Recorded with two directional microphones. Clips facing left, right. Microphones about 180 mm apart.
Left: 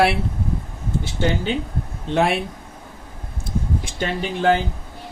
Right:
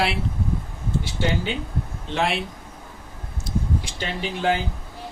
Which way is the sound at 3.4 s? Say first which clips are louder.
Left 1 dB; 50° left (ahead or behind).